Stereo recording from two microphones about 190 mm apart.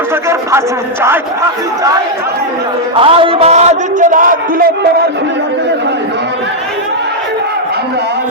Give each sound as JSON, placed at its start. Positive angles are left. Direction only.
{"t": 2.9, "sound": "a man's voice", "side_deg": -30}